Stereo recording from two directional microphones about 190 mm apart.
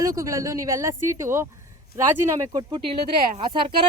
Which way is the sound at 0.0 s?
15° right (ahead or behind).